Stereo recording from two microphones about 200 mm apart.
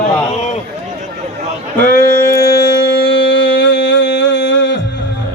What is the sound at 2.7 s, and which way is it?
Music, 55° left (ahead or behind).